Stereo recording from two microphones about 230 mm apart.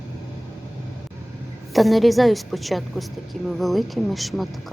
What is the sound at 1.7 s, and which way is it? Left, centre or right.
A woman's voice, centre.